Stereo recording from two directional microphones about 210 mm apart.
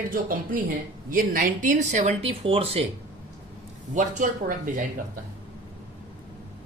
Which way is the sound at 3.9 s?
35° right (ahead or behind).